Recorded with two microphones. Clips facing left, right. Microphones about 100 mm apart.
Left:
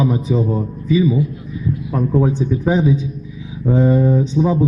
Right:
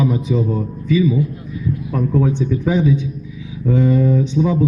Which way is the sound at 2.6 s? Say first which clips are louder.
Left 1 dB; 35° left (ahead or behind).